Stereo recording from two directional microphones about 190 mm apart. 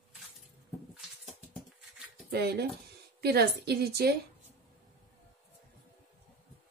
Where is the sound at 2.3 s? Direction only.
60° right (ahead or behind).